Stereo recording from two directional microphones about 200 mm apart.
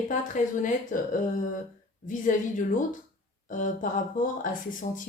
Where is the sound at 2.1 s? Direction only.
40° left (ahead or behind).